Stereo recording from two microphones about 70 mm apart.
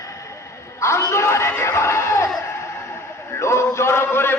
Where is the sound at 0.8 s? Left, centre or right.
Left.